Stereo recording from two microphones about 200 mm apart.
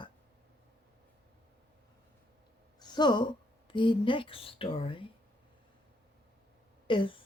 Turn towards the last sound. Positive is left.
turn(degrees=25)  # may be behind; listen again after turning